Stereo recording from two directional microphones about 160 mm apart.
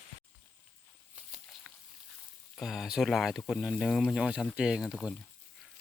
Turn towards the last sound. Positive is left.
turn(degrees=-5)  # may be behind; listen again after turning